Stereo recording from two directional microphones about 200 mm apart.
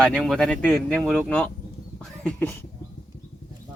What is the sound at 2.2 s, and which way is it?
Speech, 10° left (ahead or behind).